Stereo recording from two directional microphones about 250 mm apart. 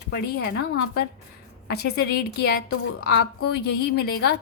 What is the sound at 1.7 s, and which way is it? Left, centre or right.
A woman's voice, left.